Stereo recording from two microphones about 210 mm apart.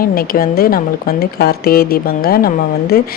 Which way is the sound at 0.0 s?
45° left (ahead or behind).